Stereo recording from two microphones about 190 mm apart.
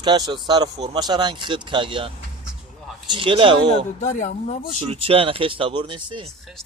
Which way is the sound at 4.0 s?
40° left (ahead or behind).